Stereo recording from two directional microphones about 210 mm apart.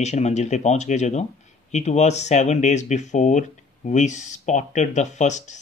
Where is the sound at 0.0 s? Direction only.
35° left (ahead or behind).